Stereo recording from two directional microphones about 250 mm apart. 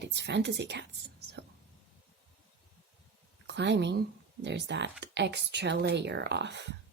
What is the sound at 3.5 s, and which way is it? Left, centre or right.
Speech, right.